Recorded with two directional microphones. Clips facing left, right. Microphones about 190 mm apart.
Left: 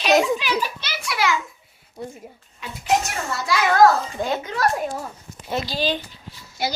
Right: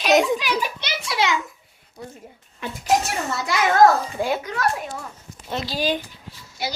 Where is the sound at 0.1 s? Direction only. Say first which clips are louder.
Even; centre (ahead or behind).